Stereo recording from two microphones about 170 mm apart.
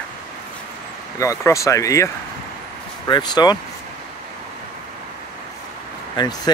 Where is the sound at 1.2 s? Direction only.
20° left (ahead or behind).